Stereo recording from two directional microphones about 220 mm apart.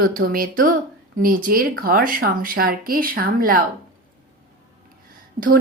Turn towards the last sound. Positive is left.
turn(degrees=-35)  # may be behind; listen again after turning